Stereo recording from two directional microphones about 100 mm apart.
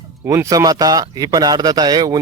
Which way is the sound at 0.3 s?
35° right (ahead or behind).